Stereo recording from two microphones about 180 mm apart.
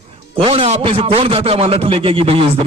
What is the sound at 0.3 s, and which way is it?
A man's voice, 30° right (ahead or behind).